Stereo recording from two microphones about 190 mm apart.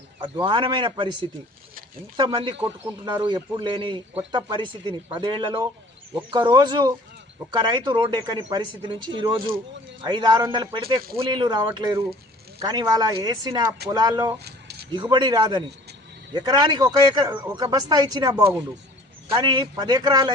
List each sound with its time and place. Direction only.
0.4 s speech: 25° right (ahead or behind)
2.1 s speech: 25° right (ahead or behind)
14.4 s a sound: 60° right (ahead or behind)
14.9 s speech: 25° right (ahead or behind)